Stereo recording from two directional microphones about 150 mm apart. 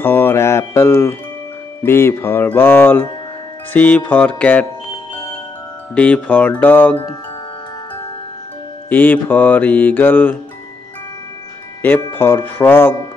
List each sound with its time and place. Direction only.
0.0 s music: 15° left (ahead or behind)
5.9 s music: 10° left (ahead or behind)
8.8 s music: 10° left (ahead or behind)
11.8 s music: 15° left (ahead or behind)